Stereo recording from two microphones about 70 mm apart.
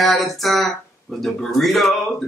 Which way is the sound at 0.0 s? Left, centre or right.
Centre.